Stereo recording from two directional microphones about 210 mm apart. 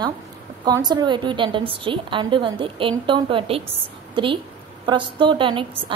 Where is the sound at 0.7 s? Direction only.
20° right (ahead or behind).